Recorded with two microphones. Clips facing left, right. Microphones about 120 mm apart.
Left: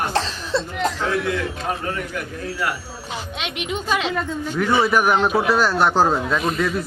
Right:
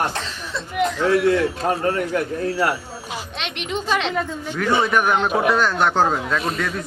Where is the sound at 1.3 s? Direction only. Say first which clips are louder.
Right 5 dB; 35° right (ahead or behind).